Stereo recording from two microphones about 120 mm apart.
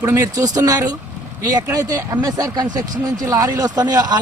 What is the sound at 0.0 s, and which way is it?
Speech, 25° right (ahead or behind).